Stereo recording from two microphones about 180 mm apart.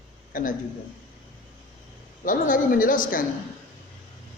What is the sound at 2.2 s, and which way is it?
A man's voice, 50° left (ahead or behind).